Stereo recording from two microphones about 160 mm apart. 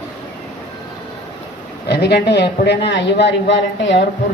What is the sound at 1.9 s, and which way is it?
A man's voice, 90° left.